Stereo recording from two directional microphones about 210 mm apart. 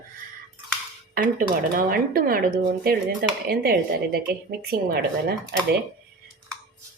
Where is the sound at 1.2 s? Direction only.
40° right (ahead or behind).